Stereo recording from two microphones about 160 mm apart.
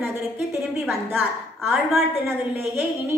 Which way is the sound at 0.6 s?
Centre (ahead or behind).